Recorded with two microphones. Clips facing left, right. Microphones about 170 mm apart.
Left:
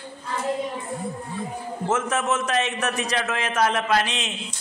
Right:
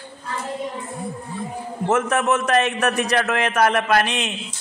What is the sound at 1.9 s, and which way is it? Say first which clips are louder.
A man's voice: right 4 dB; 60° right (ahead or behind).